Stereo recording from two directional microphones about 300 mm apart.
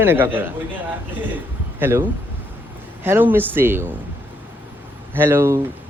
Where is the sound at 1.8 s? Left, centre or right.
Centre.